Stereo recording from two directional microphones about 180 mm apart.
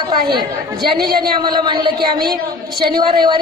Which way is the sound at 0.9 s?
60° right (ahead or behind).